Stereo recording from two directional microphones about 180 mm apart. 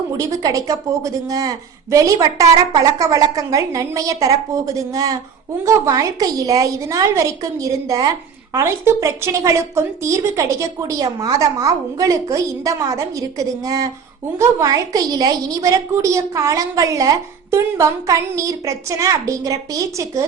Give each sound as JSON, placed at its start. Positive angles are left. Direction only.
{"t": 0.2, "sound": "a woman's voice", "side_deg": -20}